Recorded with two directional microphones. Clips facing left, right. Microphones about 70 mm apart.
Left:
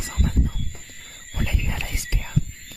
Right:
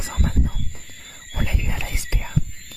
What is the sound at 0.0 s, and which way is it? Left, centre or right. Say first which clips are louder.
Wild animals: right 1 dB; right.